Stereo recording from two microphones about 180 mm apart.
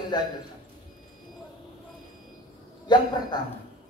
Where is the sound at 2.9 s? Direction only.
25° left (ahead or behind).